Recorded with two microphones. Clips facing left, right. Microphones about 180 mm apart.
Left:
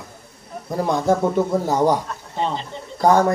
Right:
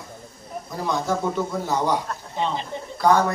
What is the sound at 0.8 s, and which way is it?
Speech, 50° left (ahead or behind).